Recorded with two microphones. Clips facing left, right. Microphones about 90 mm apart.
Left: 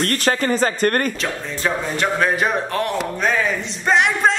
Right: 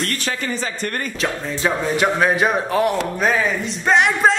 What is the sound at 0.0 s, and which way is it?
Speech, 50° left (ahead or behind).